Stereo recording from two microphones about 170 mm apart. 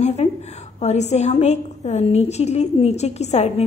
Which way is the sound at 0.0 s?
40° left (ahead or behind).